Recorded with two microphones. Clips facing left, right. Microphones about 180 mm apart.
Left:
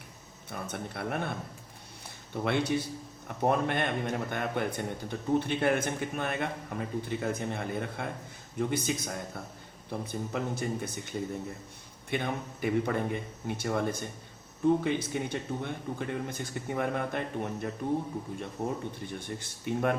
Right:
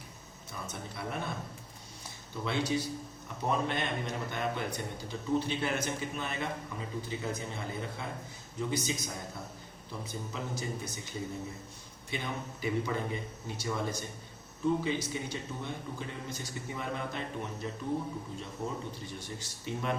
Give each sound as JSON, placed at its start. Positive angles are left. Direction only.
{"t": 0.5, "sound": "a man's voice", "side_deg": 60}
{"t": 2.3, "sound": "a man's voice", "side_deg": 60}
{"t": 12.1, "sound": "a man's voice", "side_deg": 55}
{"t": 19.0, "sound": "a man's voice", "side_deg": 55}